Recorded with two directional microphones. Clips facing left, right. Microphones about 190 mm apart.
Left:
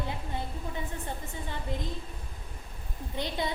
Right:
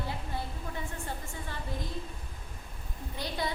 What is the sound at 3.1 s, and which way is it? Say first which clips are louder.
Speech: left 3 dB; 20° left (ahead or behind).